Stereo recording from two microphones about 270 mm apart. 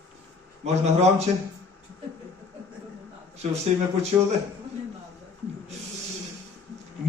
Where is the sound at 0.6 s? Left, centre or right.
Right.